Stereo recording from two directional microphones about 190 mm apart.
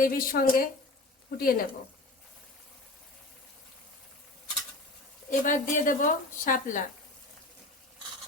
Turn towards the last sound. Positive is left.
turn(degrees=45)  # may be behind; listen again after turning